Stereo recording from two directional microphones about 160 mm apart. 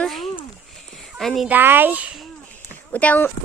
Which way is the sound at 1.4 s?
10° right (ahead or behind).